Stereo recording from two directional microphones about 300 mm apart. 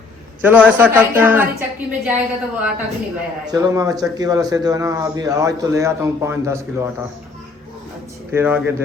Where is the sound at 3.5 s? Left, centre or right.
Centre.